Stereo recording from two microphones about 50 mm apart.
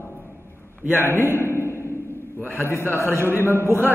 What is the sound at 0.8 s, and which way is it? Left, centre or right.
Speech, left.